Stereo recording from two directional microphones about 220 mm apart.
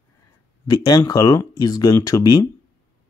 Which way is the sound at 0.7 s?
15° left (ahead or behind).